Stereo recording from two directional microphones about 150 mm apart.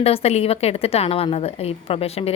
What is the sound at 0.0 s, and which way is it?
A woman's voice, 40° left (ahead or behind).